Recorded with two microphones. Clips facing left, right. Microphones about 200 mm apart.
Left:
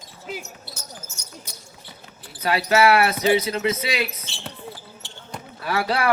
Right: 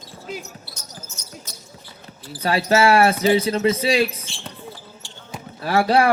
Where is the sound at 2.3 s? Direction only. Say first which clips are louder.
Right 2 dB; 30° right (ahead or behind).